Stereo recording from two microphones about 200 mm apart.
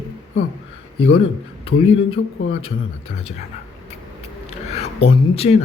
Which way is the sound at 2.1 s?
90° left.